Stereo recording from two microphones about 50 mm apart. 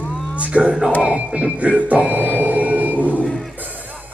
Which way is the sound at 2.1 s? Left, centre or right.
Right.